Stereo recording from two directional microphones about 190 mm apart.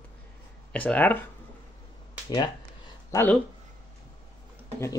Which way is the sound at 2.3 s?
20° left (ahead or behind).